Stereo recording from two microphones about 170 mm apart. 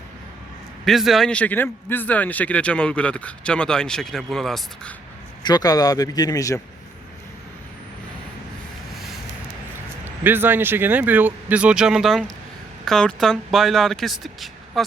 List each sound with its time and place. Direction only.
0.9 s a man's voice: centre (ahead or behind)
5.4 s speech: 25° left (ahead or behind)
10.0 s speech: 10° right (ahead or behind)